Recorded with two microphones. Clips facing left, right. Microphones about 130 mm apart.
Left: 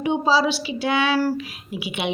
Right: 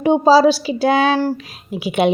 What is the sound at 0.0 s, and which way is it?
A woman's voice, 40° right (ahead or behind).